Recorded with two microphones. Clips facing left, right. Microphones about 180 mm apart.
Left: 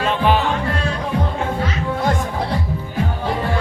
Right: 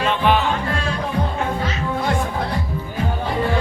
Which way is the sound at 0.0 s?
35° left (ahead or behind).